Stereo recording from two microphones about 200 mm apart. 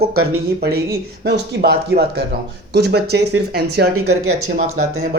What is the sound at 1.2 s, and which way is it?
Speech, 55° right (ahead or behind).